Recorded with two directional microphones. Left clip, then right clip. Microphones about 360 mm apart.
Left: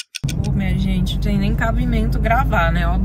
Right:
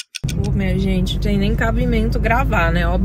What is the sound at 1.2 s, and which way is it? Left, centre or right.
Speech, centre.